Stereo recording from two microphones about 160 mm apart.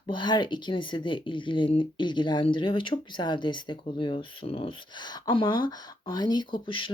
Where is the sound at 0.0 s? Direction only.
30° left (ahead or behind).